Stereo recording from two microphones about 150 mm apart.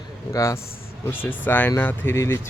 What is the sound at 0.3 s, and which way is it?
Speech, 20° left (ahead or behind).